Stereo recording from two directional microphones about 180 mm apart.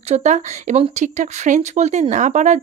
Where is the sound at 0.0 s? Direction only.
40° right (ahead or behind).